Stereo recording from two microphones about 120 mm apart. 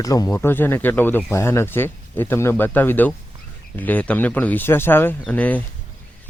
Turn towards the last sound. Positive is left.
turn(degrees=15)  # may be behind; listen again after turning